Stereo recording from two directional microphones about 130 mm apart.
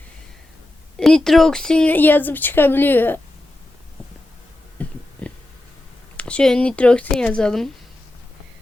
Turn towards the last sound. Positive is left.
turn(degrees=5)  # may be behind; listen again after turning